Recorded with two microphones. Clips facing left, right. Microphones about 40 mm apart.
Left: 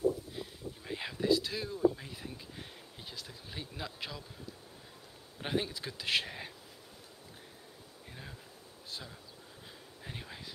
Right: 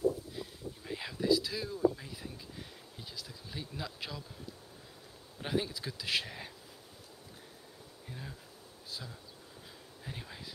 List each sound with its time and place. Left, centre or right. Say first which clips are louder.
0.3 s a sound: even; centre
1.4 s speech: even; left
1.7 s speech: left 1 dB; centre
5.4 s speech: even; centre
6.2 s speech: left 1 dB; centre
8.1 s speech: right 3 dB; centre
8.9 s speech: even; left
10.0 s speech: even; centre